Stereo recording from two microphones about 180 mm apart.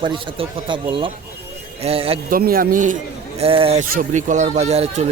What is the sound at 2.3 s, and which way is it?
A man's voice, 55° right (ahead or behind).